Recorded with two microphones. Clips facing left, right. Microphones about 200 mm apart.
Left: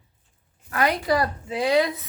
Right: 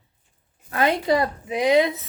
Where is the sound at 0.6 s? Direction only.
25° right (ahead or behind).